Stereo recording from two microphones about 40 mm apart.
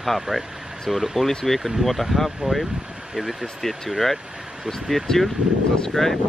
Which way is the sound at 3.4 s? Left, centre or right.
Centre.